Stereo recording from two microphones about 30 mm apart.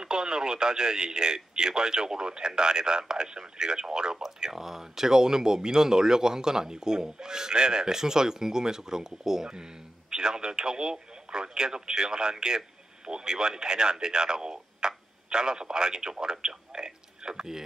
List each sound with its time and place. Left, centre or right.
0.0 s speech: right
4.5 s speech: centre; by 17.5 s right